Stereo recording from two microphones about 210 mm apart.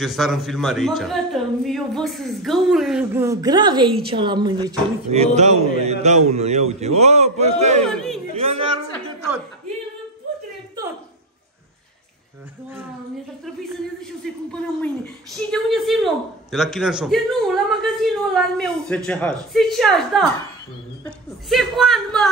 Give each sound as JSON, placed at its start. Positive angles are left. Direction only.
{"t": 0.0, "sound": "a man's voice", "side_deg": 0}
{"t": 7.8, "sound": "speech", "side_deg": 0}
{"t": 8.4, "sound": "a sound", "side_deg": -30}
{"t": 10.8, "sound": "a sound", "side_deg": -20}
{"t": 14.2, "sound": "a man's voice", "side_deg": 5}
{"t": 21.5, "sound": "a man's voice", "side_deg": 0}